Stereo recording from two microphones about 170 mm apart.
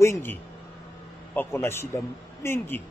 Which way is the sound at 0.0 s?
15° left (ahead or behind).